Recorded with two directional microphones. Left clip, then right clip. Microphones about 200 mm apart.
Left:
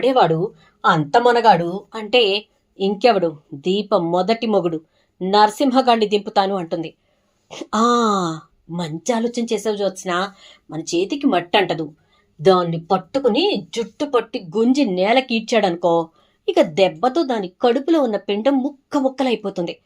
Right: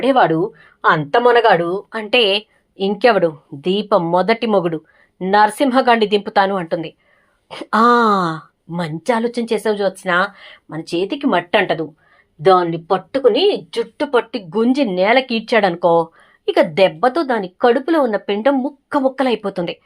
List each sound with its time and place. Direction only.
0.0 s speech: 15° right (ahead or behind)